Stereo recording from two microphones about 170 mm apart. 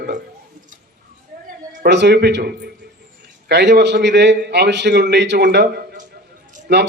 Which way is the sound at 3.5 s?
90° right.